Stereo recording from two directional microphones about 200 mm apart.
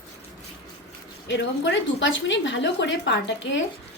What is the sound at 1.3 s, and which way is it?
A woman's voice, 60° left (ahead or behind).